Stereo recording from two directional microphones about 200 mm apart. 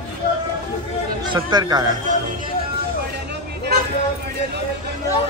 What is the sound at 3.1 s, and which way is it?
Hubbub, 55° right (ahead or behind).